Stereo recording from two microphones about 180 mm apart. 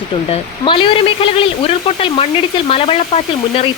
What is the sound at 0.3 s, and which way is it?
Speech, 30° left (ahead or behind).